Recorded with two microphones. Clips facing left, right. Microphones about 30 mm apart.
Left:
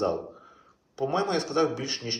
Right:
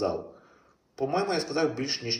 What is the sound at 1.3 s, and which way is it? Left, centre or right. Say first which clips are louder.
Speech: left 2 dB; centre.